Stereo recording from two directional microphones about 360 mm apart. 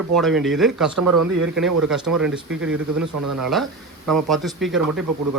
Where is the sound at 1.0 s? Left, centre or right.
Right.